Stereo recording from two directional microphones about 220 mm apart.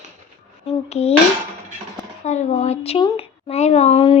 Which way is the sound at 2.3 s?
30° left (ahead or behind).